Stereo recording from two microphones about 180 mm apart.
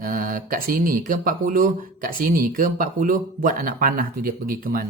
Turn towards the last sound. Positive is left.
turn(degrees=-50)  # may be behind; listen again after turning